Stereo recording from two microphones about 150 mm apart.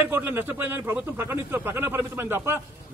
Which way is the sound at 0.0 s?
15° right (ahead or behind).